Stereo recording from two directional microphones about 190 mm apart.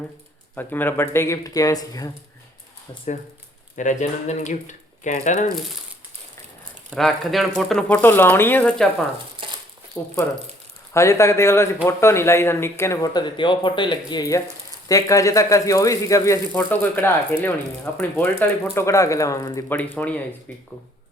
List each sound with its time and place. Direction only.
0.5 s speech: 10° left (ahead or behind)
3.8 s speech: 40° left (ahead or behind)
6.9 s speech: centre (ahead or behind)
9.4 s a sound: 25° right (ahead or behind)
10.0 s speech: 10° left (ahead or behind)